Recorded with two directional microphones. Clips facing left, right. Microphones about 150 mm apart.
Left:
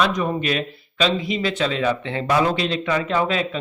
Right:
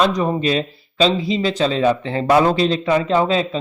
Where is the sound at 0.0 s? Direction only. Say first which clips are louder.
Right 4 dB; 30° right (ahead or behind).